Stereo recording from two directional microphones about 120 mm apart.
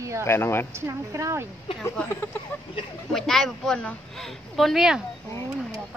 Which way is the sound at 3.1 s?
5° left (ahead or behind).